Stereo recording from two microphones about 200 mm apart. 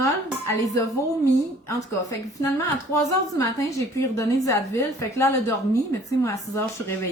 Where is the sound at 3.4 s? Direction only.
15° left (ahead or behind).